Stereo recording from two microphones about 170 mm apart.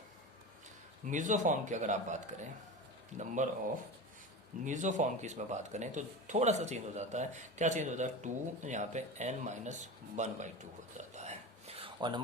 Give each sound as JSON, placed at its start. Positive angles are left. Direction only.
{"t": 1.1, "sound": "speech", "side_deg": -45}
{"t": 4.6, "sound": "speech", "side_deg": -45}
{"t": 10.9, "sound": "whispering", "side_deg": -40}
{"t": 11.9, "sound": "speech", "side_deg": -25}